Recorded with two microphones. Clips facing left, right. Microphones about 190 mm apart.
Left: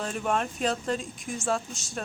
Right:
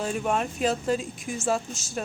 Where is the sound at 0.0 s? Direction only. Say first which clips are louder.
Right 2 dB; 5° right (ahead or behind).